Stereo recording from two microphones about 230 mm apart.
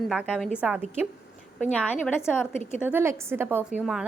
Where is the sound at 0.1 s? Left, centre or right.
Centre.